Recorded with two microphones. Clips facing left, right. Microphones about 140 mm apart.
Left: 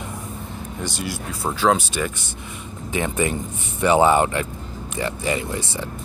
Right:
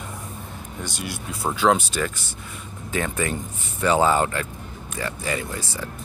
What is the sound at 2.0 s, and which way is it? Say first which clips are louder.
Speech: left 1 dB; 10° left (ahead or behind).